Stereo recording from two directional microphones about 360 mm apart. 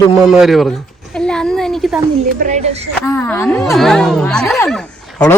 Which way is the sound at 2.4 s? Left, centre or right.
Centre.